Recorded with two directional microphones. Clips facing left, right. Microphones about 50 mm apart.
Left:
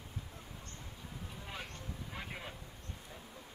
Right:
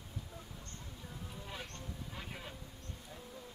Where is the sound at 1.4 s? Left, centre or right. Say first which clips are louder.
Left 1 dB; left.